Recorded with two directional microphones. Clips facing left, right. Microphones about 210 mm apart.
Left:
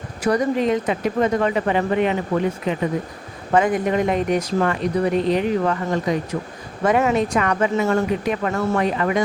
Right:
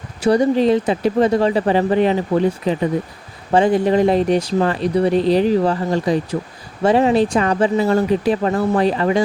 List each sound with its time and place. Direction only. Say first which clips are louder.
0.2 s speech: right 5 dB; 30° right (ahead or behind)